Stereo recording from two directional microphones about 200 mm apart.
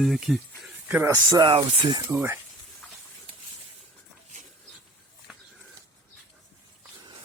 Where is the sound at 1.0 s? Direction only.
15° right (ahead or behind).